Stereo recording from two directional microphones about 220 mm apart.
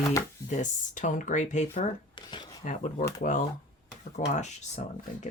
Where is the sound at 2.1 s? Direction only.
20° left (ahead or behind).